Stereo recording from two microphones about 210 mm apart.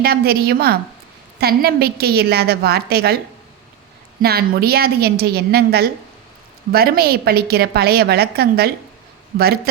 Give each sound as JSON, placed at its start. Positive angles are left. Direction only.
{"t": 0.0, "sound": "a woman's voice", "side_deg": -45}
{"t": 4.2, "sound": "a woman's voice", "side_deg": -45}